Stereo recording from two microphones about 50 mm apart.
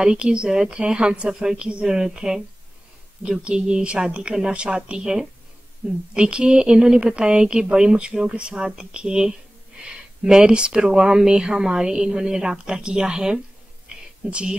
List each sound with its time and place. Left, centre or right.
0.0 s a woman's voice: centre
8.1 s speech: centre
8.4 s a woman's voice: right